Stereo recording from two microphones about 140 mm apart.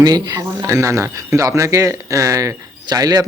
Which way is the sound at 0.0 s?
25° right (ahead or behind).